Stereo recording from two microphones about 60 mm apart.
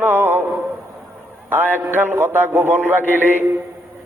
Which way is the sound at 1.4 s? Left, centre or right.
Right.